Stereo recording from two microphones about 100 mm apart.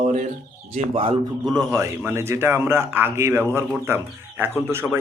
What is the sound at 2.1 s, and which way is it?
Speech, 25° right (ahead or behind).